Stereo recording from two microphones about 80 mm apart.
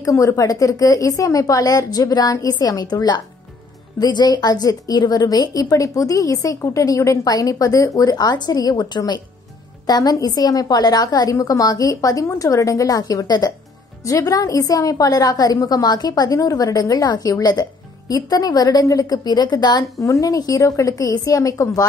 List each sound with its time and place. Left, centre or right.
0.0 s a woman's voice: left
9.8 s a woman's voice: left
20.0 s a woman's voice: left